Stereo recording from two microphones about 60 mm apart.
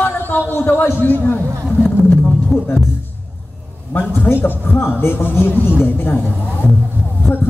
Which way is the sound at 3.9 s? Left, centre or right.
Left.